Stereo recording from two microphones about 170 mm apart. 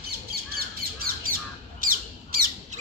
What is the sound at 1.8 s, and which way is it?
Squawk, 55° right (ahead or behind).